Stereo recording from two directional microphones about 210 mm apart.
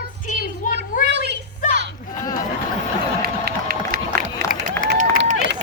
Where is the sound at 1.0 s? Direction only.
55° right (ahead or behind).